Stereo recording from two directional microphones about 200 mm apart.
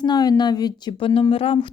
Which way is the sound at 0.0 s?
20° left (ahead or behind).